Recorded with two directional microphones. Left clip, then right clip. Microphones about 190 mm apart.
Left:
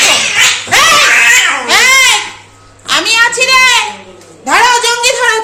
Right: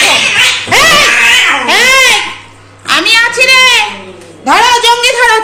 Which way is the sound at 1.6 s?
10° right (ahead or behind).